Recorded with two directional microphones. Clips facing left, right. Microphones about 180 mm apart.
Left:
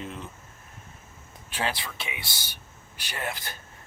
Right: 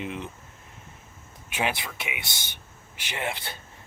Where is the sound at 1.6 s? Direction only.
20° right (ahead or behind).